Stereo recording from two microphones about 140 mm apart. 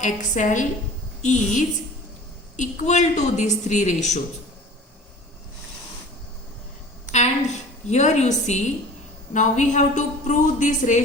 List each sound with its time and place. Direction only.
0.0 s a woman's voice: 60° left (ahead or behind)
7.9 s a woman's voice: 55° left (ahead or behind)